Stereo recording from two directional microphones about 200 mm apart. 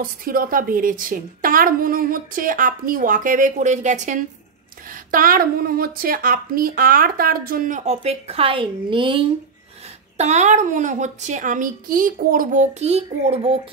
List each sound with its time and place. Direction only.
0.0 s speech: 45° right (ahead or behind); by 9.2 s 25° right (ahead or behind)
10.1 s a woman's voice: 35° right (ahead or behind)